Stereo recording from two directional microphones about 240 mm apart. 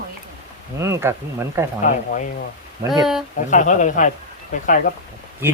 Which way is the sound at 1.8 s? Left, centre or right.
Left.